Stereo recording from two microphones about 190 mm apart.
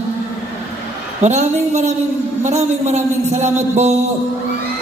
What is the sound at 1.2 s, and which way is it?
A man's voice, 35° right (ahead or behind).